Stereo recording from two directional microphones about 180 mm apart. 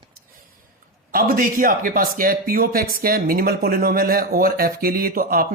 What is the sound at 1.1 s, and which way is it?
Speech, 55° right (ahead or behind).